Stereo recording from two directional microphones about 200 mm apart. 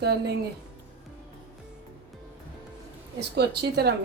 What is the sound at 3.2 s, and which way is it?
Speech, 55° right (ahead or behind).